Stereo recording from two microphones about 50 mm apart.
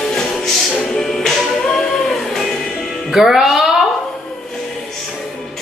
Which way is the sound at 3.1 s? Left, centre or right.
Centre.